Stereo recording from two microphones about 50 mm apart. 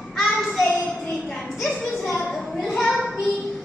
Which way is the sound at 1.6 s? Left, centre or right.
Centre.